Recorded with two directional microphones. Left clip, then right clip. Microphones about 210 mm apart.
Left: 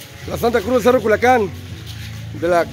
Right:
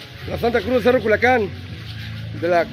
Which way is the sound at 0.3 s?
20° left (ahead or behind).